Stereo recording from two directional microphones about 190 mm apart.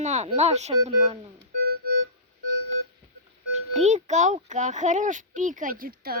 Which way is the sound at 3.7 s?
35° right (ahead or behind).